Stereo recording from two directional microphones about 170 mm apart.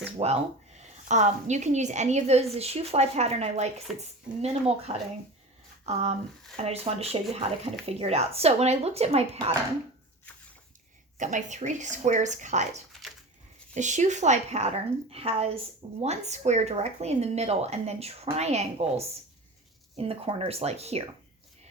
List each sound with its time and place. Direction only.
0.2 s a woman's voice: 35° right (ahead or behind)
1.0 s a woman's voice: 45° right (ahead or behind)
11.2 s a woman's voice: 45° right (ahead or behind)